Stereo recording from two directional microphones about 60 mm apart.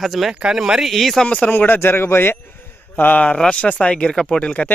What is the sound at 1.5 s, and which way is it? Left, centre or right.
A man's voice, left.